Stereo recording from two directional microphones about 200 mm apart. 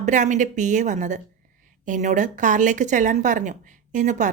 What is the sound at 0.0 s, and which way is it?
Speech, 35° right (ahead or behind).